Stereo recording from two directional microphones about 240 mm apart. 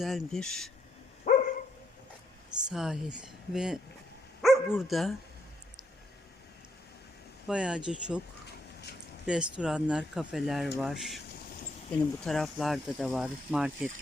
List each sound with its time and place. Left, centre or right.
0.0 s speech: centre
1.3 s dog: left
2.6 s speech: centre
7.4 s speech: centre
9.2 s speech: centre
12.2 s speech: centre